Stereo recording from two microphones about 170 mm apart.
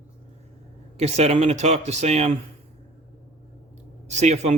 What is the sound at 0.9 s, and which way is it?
Speech, 40° right (ahead or behind).